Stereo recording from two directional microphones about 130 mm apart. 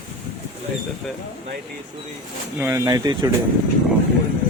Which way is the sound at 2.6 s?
25° right (ahead or behind).